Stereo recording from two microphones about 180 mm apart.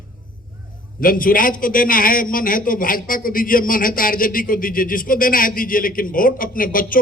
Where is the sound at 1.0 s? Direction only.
50° left (ahead or behind).